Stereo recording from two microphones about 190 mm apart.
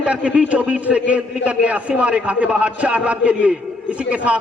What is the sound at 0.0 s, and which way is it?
A man's voice, 5° right (ahead or behind).